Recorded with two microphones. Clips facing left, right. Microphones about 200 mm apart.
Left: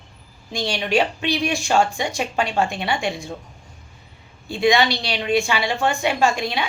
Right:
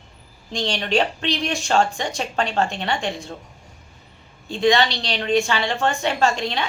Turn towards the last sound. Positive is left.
turn(degrees=10)  # may be behind; listen again after turning